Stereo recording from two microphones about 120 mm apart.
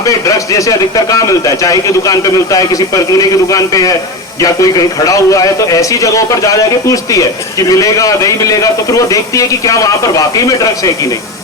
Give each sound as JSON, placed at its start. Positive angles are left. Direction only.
{"t": 0.0, "sound": "a man's voice", "side_deg": 25}